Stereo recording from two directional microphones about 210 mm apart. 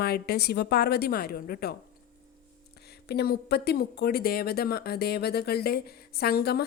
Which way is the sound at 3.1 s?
50° left (ahead or behind).